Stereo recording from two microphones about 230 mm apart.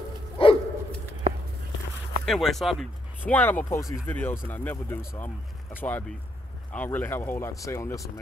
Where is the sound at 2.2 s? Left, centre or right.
Centre.